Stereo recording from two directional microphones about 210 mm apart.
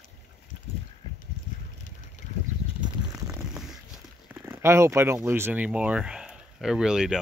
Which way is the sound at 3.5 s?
Centre (ahead or behind).